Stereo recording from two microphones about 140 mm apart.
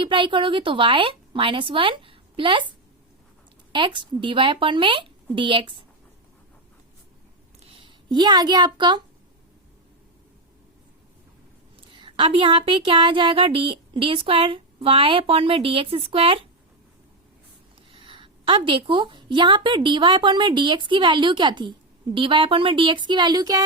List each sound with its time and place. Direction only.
0.0 s a woman's voice: 35° right (ahead or behind)
3.7 s a woman's voice: 35° right (ahead or behind)
7.7 s speech: 35° right (ahead or behind)
11.9 s a woman's voice: 35° right (ahead or behind)
17.9 s a woman's voice: 35° right (ahead or behind)